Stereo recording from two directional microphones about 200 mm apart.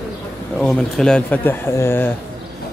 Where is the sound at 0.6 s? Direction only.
Centre (ahead or behind).